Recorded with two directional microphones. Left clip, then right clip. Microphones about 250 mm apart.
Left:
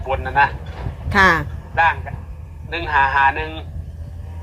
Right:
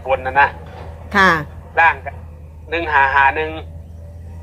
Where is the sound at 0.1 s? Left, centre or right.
Right.